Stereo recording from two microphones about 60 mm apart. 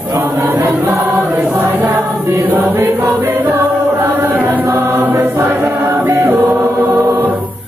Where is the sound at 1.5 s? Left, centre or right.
Right.